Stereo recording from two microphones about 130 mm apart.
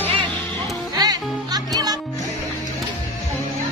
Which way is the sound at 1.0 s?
30° right (ahead or behind).